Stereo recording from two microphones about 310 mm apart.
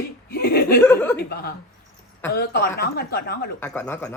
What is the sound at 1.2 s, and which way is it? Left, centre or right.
A woman's voice, left.